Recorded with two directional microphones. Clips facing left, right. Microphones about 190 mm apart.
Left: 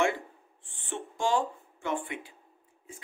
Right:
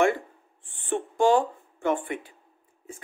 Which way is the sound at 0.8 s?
55° right (ahead or behind).